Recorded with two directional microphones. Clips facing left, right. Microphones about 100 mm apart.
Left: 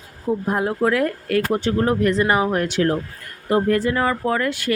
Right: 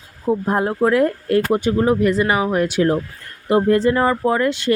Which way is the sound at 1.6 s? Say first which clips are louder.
Right 3 dB; 10° right (ahead or behind).